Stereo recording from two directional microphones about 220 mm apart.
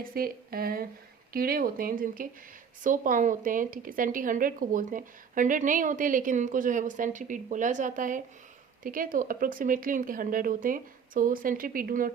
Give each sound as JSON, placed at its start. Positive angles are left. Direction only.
{"t": 0.0, "sound": "speech", "side_deg": -45}